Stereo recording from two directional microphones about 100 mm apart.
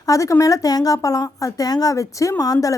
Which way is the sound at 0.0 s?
35° left (ahead or behind).